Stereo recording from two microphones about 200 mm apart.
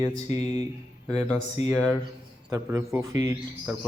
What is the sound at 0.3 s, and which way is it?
Speech, 35° left (ahead or behind).